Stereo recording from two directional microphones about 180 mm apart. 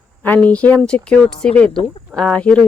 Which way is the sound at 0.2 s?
10° left (ahead or behind).